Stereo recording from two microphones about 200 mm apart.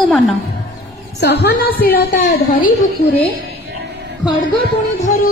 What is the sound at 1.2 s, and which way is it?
A woman's voice, 55° left (ahead or behind).